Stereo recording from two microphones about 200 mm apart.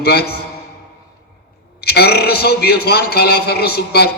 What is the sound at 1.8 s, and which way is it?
A man's voice, 50° left (ahead or behind).